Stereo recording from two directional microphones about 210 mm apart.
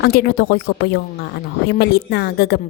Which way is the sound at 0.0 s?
45° left (ahead or behind).